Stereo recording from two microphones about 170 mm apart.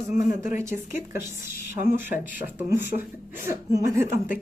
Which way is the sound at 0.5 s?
15° right (ahead or behind).